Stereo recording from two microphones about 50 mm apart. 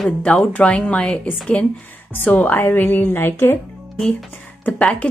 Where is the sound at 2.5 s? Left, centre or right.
Left.